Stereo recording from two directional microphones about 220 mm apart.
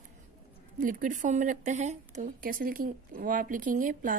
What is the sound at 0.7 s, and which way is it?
A woman's voice, 35° right (ahead or behind).